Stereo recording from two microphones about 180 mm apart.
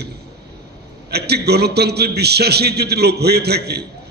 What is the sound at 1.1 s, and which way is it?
A man's voice, 65° right (ahead or behind).